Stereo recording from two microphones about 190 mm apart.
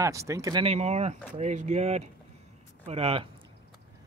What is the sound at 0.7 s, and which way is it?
Speech, 35° right (ahead or behind).